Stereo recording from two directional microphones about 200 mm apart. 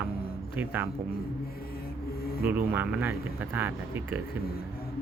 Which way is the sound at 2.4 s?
10° right (ahead or behind).